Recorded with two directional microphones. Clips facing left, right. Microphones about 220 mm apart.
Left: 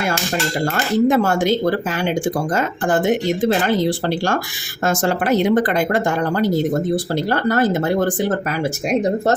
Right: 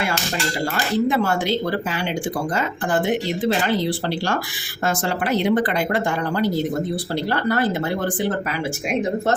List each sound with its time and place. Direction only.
0.6 s speech: 45° left (ahead or behind)